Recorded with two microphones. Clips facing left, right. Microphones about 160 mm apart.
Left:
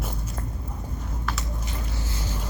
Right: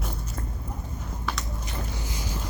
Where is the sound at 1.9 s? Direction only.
15° right (ahead or behind).